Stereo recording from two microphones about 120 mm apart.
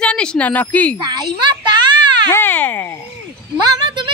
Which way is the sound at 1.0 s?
35° right (ahead or behind).